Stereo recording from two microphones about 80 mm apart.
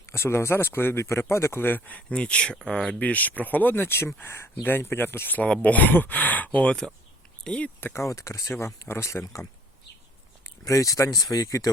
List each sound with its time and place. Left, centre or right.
0.0 s speech: left; by 7.7 s centre
7.8 s speech: left
10.6 s speech: left